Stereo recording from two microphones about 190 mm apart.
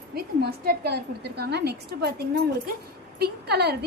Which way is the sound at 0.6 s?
55° right (ahead or behind).